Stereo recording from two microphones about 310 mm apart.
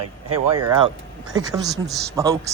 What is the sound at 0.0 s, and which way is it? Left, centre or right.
Speech, right.